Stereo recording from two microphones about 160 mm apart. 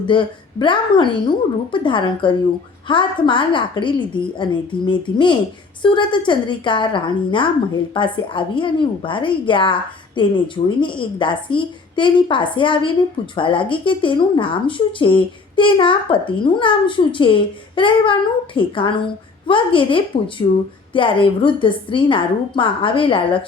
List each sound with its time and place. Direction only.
0.0 s speech: 30° left (ahead or behind)